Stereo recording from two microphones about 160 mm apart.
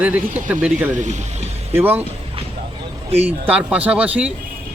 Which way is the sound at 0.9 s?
50° right (ahead or behind).